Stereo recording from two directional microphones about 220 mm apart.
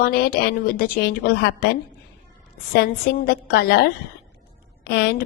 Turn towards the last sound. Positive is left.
turn(degrees=45)  # may be behind; listen again after turning